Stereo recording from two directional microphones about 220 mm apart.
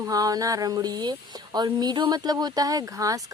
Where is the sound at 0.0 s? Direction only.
15° right (ahead or behind).